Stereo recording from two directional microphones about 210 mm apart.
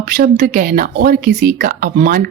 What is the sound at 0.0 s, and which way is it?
A woman's voice, 50° right (ahead or behind).